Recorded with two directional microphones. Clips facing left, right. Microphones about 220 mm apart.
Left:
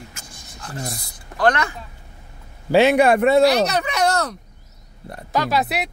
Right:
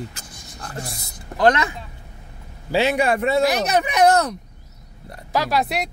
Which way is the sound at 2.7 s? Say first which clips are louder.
Left 5 dB; 60° left (ahead or behind).